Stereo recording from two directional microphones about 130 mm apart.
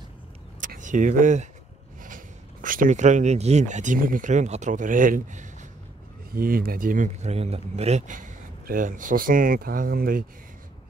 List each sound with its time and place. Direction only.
0.6 s vehicle: 80° right
2.0 s speech: 90° right; by 5.7 s 70° right (ahead or behind)
6.4 s a man's voice: 90° right; by 8.3 s 70° right (ahead or behind)
8.7 s speech: 90° right